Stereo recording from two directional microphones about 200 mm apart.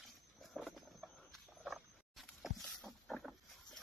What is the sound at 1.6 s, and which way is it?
Vehicle, centre (ahead or behind).